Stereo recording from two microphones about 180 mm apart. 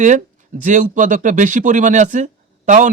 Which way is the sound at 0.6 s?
45° right (ahead or behind).